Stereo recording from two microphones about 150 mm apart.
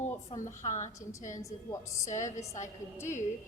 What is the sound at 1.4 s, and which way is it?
Speech, 20° left (ahead or behind).